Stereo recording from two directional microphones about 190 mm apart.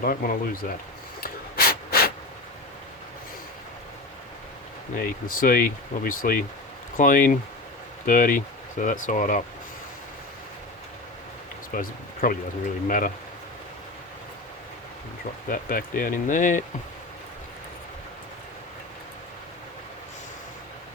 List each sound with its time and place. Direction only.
0.0 s speech: 50° left (ahead or behind)
1.2 s snort: 55° left (ahead or behind)
4.9 s speech: 50° left (ahead or behind)
11.7 s speech: 45° left (ahead or behind)
15.4 s speech: 50° left (ahead or behind)